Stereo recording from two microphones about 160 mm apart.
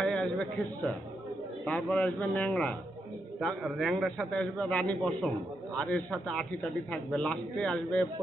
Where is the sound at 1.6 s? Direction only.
5° left (ahead or behind).